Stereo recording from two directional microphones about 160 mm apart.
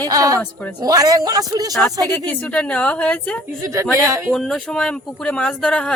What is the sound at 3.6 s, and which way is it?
Speech, 20° right (ahead or behind).